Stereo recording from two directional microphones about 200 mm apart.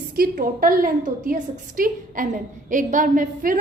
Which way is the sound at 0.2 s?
45° right (ahead or behind).